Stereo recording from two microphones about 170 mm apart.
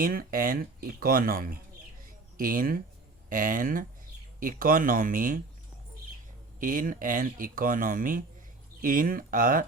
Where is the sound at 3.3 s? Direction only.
55° right (ahead or behind).